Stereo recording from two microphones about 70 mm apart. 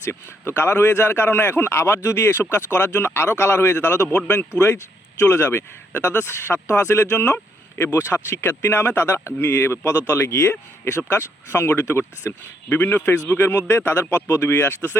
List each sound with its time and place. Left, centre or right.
0.0 s speech: left
5.3 s speech: left